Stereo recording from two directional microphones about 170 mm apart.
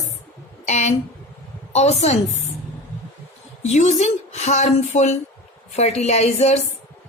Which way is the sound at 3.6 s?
45° left (ahead or behind).